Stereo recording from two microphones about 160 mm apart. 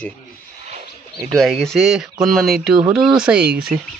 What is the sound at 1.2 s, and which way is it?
Speech, centre (ahead or behind).